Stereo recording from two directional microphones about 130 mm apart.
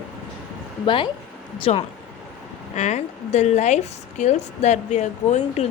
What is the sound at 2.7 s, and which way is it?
A woman's voice, 65° left (ahead or behind).